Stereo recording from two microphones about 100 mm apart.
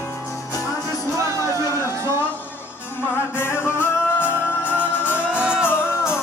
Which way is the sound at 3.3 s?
25° left (ahead or behind).